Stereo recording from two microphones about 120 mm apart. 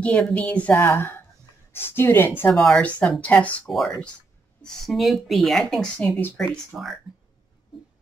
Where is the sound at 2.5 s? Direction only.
5° left (ahead or behind).